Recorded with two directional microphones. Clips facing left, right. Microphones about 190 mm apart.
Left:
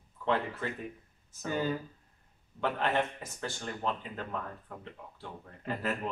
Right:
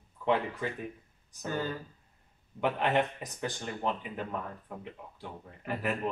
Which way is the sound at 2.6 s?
15° right (ahead or behind).